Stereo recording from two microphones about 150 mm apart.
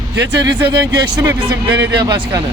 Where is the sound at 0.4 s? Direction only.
30° right (ahead or behind).